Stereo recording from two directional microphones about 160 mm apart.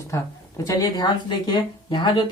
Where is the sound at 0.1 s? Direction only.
20° left (ahead or behind).